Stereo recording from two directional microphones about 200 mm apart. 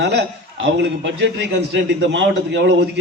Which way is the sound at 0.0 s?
60° right (ahead or behind).